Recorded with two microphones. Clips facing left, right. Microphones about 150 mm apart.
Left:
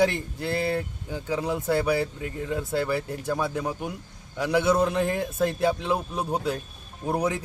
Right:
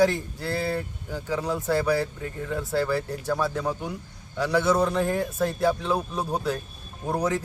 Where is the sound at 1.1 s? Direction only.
15° left (ahead or behind).